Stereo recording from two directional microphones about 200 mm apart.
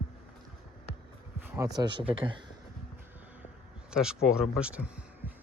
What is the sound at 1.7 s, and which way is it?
Speech, 25° right (ahead or behind).